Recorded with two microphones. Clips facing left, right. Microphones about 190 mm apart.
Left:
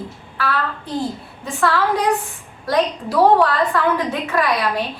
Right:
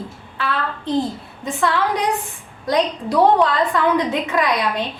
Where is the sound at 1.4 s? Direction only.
20° right (ahead or behind).